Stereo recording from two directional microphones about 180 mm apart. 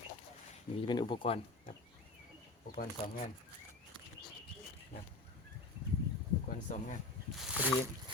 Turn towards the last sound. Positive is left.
turn(degrees=-10)  # may be behind; listen again after turning